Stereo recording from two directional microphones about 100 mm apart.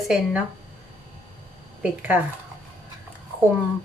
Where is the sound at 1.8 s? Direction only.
15° right (ahead or behind).